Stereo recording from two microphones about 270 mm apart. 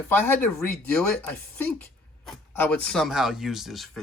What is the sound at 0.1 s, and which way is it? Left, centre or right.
Speech, centre.